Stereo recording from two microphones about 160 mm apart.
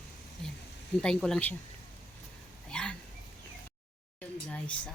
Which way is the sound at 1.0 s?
5° left (ahead or behind).